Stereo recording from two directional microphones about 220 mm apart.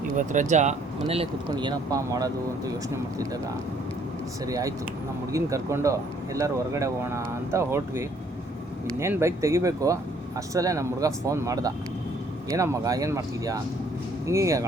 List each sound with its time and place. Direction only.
0.2 s speech: 35° right (ahead or behind); by 2.7 s 15° right (ahead or behind)
4.4 s speech: 15° right (ahead or behind)